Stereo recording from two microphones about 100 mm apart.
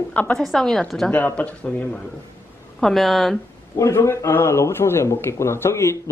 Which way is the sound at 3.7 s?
30° left (ahead or behind).